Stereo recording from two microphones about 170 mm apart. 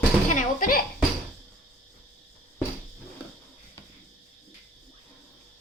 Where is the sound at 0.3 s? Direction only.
55° left (ahead or behind).